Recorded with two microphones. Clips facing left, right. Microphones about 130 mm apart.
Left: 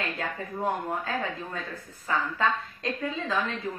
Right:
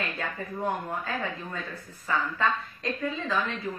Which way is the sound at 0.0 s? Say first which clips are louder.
Left 1 dB; 25° left (ahead or behind).